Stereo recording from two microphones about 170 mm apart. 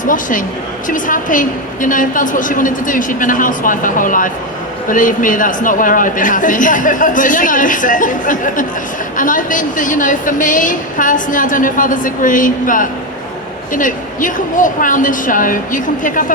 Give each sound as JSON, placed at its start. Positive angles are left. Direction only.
{"t": 0.0, "sound": "a woman's voice", "side_deg": 50}